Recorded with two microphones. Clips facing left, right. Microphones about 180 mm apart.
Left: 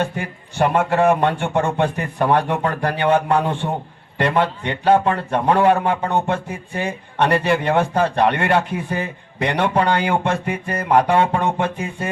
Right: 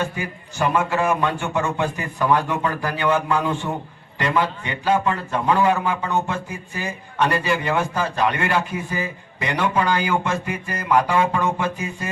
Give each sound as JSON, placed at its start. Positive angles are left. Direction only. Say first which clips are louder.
{"t": 0.0, "sound": "a man's voice", "louder": "left 3 dB", "side_deg": 60}